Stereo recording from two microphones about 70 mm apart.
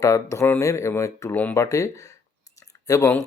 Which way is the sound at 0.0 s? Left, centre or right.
Left.